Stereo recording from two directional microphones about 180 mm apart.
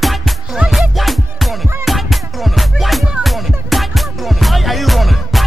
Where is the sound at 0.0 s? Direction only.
Centre (ahead or behind).